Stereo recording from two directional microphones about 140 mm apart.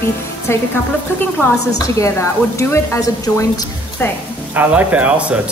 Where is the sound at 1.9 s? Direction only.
20° left (ahead or behind).